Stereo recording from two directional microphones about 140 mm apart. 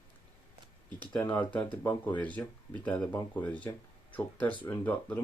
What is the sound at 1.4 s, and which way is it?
Speech, 10° left (ahead or behind).